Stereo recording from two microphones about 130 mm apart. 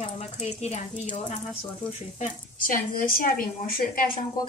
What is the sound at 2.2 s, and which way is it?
A woman's voice, 90° left.